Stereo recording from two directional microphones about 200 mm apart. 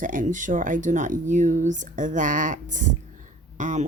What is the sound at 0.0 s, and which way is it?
Speech, 40° right (ahead or behind).